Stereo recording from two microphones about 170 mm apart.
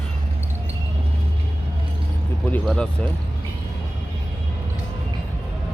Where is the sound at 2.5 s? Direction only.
5° left (ahead or behind).